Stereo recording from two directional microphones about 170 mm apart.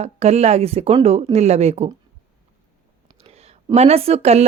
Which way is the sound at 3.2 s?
35° right (ahead or behind).